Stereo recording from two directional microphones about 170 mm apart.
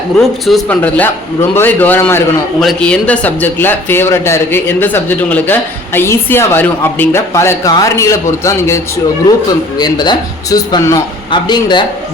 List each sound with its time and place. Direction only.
0.2 s a man's voice: centre (ahead or behind)
0.8 s speech: 10° left (ahead or behind)